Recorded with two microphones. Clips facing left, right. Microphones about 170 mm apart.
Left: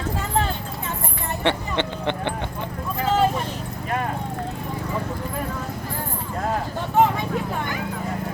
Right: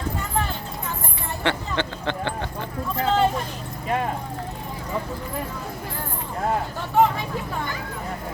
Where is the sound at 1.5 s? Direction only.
20° left (ahead or behind).